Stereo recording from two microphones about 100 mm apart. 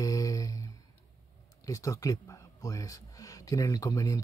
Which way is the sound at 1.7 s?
35° left (ahead or behind).